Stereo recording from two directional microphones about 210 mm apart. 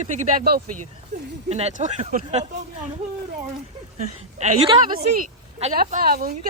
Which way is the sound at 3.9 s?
35° right (ahead or behind).